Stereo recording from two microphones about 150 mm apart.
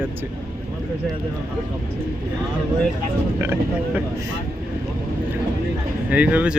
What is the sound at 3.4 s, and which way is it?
Speech, 15° right (ahead or behind).